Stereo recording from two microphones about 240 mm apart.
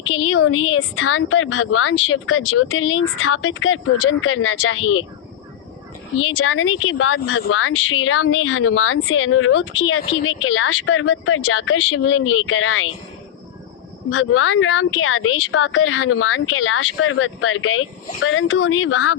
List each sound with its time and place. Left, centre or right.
0.0 s speech: left
6.1 s speech: left
14.1 s speech: left